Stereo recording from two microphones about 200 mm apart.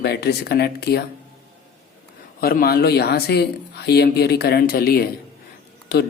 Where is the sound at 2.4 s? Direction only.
50° left (ahead or behind).